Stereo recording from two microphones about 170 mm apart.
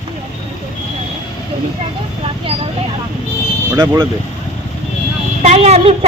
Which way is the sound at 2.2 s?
30° right (ahead or behind).